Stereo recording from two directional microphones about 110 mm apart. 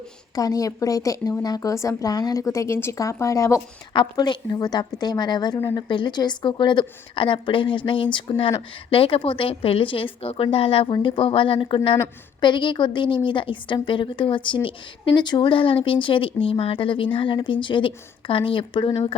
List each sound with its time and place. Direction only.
0.3 s speech: 35° left (ahead or behind)
3.9 s a woman's voice: 45° left (ahead or behind)
10.9 s a woman's voice: 50° left (ahead or behind)